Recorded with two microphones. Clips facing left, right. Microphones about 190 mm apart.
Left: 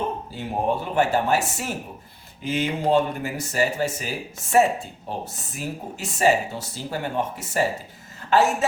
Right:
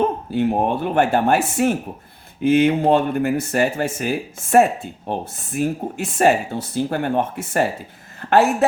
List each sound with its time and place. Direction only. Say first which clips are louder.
0.3 s speech: right 6 dB; 60° right (ahead or behind)